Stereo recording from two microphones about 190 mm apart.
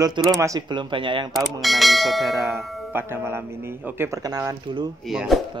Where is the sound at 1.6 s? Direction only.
Centre (ahead or behind).